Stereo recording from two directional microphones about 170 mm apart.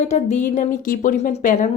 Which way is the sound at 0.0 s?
45° left (ahead or behind).